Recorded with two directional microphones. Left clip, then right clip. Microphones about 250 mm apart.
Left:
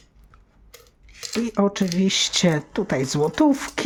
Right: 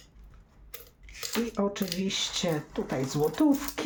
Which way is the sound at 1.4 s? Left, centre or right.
Left.